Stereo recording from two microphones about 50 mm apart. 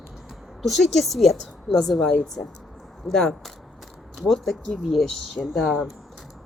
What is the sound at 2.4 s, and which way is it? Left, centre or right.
Speech, left.